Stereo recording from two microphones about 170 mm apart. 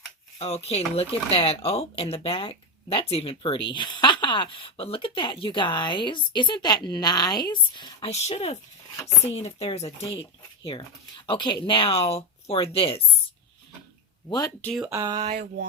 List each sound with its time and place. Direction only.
0.3 s speech: 40° left (ahead or behind)
8.1 s speech: 40° left (ahead or behind)
14.3 s speech: 20° left (ahead or behind)
14.6 s speech: centre (ahead or behind)
14.8 s speech: 20° right (ahead or behind)
15.3 s mantra: 60° right (ahead or behind)